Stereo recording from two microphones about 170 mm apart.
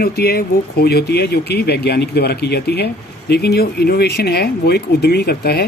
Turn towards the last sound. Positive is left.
turn(degrees=70)  # may be behind; listen again after turning